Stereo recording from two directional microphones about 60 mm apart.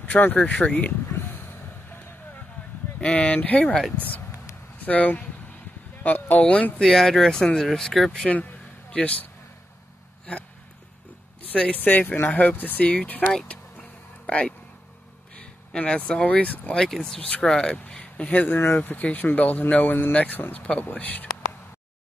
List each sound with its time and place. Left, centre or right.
0.0 s speech: left
1.1 s a sound: left
3.0 s speech: centre
6.4 s speech: centre
6.9 s speech: centre
8.3 s speech: left
11.7 s speech: left
13.5 s vehicle: left
15.4 s a sound: centre
16.0 s speech: left
16.8 s speech: centre; by 20.5 s left
20.5 s speech: centre